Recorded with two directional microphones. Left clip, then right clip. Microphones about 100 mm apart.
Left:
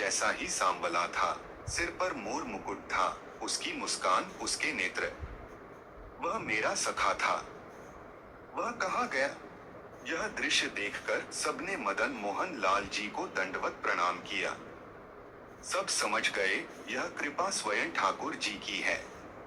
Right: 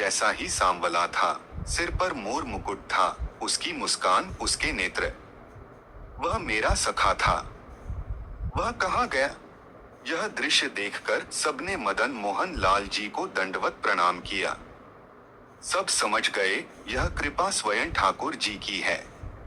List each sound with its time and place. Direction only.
0.0 s a man's voice: 50° right (ahead or behind)
6.1 s a man's voice: 50° right (ahead or behind)
8.5 s a man's voice: 45° right (ahead or behind)
15.6 s a man's voice: 45° right (ahead or behind)